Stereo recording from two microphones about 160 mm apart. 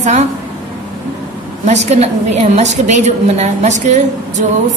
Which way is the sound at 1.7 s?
40° right (ahead or behind).